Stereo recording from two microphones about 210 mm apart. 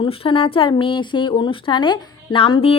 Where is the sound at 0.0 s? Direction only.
25° left (ahead or behind).